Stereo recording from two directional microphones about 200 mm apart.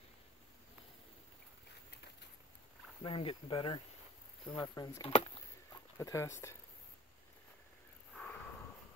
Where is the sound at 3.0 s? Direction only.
25° left (ahead or behind).